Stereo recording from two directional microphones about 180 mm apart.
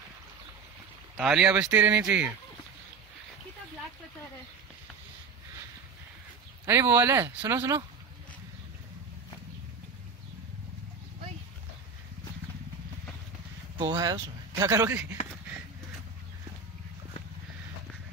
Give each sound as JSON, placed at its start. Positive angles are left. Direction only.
{"t": 1.1, "sound": "speech", "side_deg": -5}
{"t": 6.6, "sound": "speech", "side_deg": -15}
{"t": 13.7, "sound": "speech", "side_deg": -25}